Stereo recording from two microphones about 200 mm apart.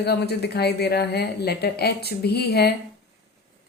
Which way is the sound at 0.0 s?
55° left (ahead or behind).